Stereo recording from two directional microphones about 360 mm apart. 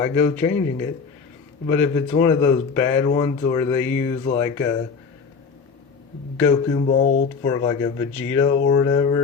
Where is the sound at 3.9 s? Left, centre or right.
Left.